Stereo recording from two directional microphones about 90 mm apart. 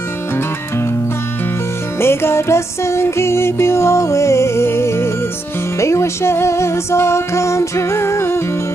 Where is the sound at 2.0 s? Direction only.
30° left (ahead or behind).